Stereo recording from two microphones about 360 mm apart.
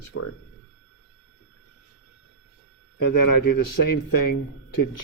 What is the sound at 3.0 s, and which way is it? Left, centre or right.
Speech, left.